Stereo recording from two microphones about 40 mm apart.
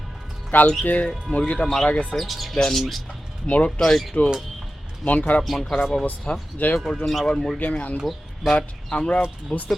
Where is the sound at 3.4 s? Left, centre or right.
Left.